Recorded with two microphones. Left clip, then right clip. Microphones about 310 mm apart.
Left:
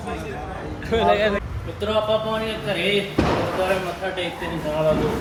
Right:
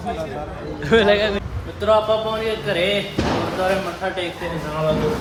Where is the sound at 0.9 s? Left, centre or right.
Right.